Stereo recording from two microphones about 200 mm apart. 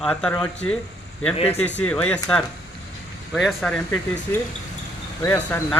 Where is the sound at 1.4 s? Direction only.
30° left (ahead or behind).